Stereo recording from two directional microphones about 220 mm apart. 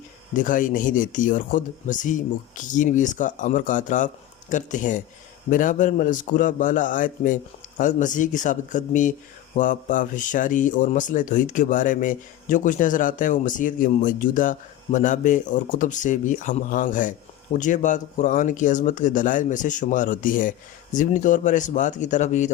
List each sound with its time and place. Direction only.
0.3 s speech: 35° left (ahead or behind)